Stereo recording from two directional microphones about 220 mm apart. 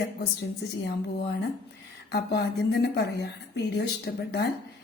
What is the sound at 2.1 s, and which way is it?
Speech, 50° left (ahead or behind).